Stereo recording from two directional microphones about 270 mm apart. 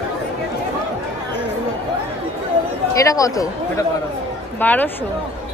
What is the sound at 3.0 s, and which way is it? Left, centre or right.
Speech, centre.